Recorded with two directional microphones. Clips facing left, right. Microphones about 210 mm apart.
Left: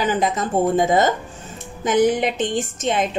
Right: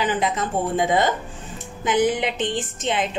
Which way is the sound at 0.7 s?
45° left (ahead or behind).